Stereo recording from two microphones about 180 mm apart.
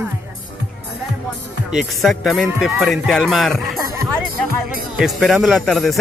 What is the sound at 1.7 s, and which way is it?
Speech, centre (ahead or behind).